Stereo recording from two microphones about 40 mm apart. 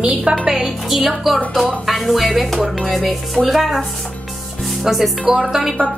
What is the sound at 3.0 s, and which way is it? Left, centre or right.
Speech, centre.